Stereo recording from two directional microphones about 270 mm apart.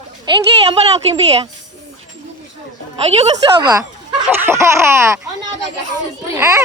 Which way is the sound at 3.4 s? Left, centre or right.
Centre.